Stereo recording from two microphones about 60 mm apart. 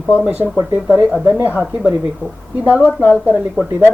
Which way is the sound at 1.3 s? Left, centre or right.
Right.